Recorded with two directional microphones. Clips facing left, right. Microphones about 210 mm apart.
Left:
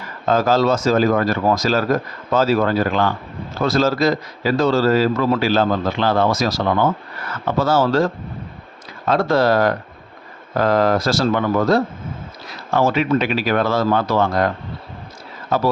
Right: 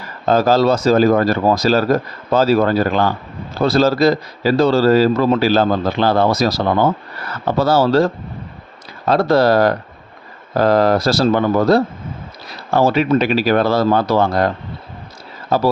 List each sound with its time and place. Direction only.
0.0 s speech: 35° right (ahead or behind)